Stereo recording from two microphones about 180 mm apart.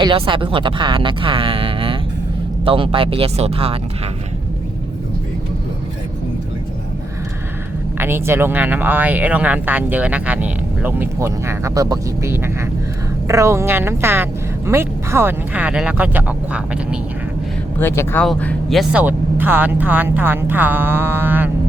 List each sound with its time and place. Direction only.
0.0 s speech: 30° right (ahead or behind)
7.9 s speech: 15° right (ahead or behind)
17.7 s speech: 15° left (ahead or behind); by 21.5 s 10° right (ahead or behind)